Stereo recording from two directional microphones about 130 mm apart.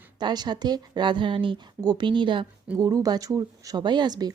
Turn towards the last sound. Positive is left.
turn(degrees=-35)  # may be behind; listen again after turning